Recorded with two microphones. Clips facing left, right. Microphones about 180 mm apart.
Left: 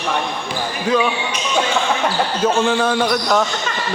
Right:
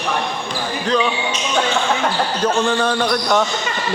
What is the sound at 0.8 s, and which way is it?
Speech, 5° left (ahead or behind).